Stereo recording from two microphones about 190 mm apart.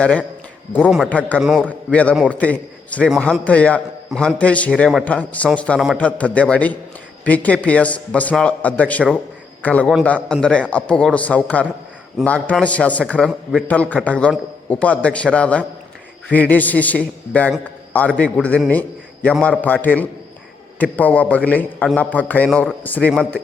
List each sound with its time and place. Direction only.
0.0 s a man's voice: 5° left (ahead or behind)